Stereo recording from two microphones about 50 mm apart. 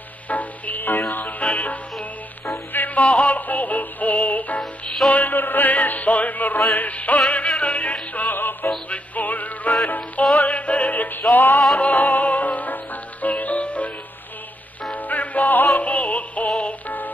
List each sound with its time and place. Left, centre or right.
0.3 s music: left
8.6 s music: left
15.0 s music: left